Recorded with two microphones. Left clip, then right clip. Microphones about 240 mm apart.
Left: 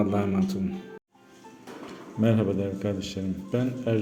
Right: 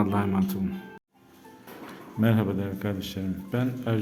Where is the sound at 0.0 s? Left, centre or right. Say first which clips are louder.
Even; centre.